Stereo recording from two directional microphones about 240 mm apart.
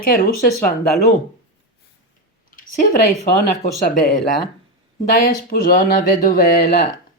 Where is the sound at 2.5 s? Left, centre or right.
Left.